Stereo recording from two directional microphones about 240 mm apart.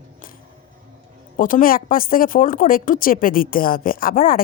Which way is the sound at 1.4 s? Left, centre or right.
Left.